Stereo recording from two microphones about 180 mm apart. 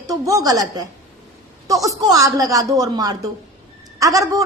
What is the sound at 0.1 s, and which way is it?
A woman's voice, 20° right (ahead or behind).